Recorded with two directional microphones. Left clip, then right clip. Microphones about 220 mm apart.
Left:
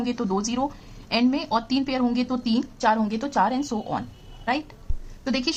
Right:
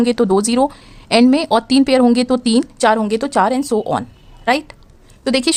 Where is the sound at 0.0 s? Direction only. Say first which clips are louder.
Right 12 dB; 45° right (ahead or behind).